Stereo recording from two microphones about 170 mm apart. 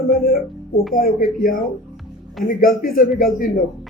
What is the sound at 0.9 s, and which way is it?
Speech, 55° left (ahead or behind).